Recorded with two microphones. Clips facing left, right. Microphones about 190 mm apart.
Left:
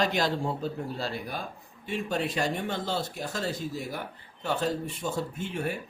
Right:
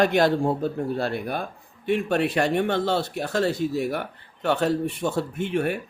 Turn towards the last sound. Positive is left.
turn(degrees=-65)  # may be behind; listen again after turning